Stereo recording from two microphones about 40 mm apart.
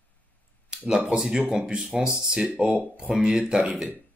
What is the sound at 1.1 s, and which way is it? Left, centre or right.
Speech, centre.